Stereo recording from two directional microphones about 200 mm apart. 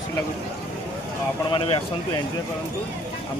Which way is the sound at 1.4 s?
25° left (ahead or behind).